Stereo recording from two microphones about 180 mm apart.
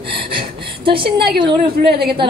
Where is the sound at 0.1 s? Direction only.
30° right (ahead or behind).